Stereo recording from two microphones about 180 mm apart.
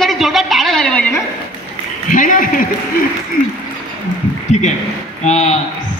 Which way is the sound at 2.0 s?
45° left (ahead or behind).